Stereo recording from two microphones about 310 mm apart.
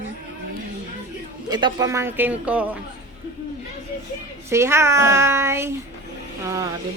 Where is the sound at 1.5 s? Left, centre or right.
Centre.